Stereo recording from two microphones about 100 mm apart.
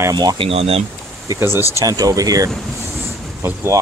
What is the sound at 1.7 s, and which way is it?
Speech, 35° right (ahead or behind).